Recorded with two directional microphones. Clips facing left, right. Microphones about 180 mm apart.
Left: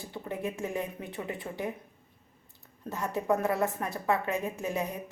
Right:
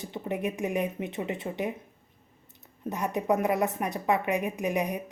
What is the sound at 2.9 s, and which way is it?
A woman's voice, 20° right (ahead or behind).